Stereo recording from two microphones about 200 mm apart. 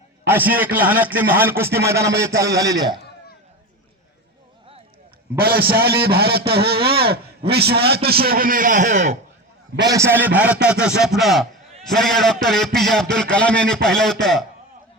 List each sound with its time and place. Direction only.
0.3 s a man's voice: 10° right (ahead or behind)
5.4 s a man's voice: 50° right (ahead or behind)
6.7 s speech: 25° right (ahead or behind)
7.5 s a man's voice: 55° right (ahead or behind); by 9.1 s 35° right (ahead or behind)
9.7 s a man's voice: 20° right (ahead or behind); by 14.4 s centre (ahead or behind)